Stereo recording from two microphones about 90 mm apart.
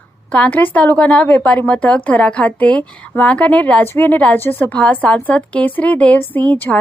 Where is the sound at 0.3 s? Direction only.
15° left (ahead or behind).